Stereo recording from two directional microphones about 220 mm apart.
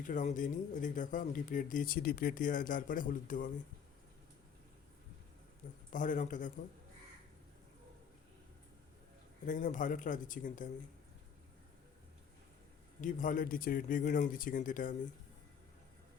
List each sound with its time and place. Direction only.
0.0 s speech: 35° left (ahead or behind)
5.9 s speech: 35° left (ahead or behind)
9.5 s speech: 35° left (ahead or behind)
13.0 s speech: 35° left (ahead or behind)